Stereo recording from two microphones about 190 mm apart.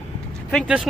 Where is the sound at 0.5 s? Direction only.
5° right (ahead or behind).